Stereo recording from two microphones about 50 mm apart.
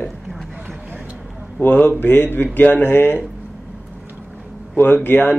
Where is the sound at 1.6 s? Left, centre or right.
Left.